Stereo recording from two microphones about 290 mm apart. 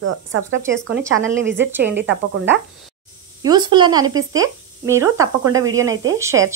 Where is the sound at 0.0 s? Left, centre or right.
Right.